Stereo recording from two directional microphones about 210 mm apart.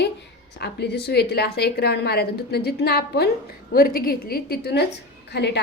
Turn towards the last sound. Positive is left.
turn(degrees=55)  # may be behind; listen again after turning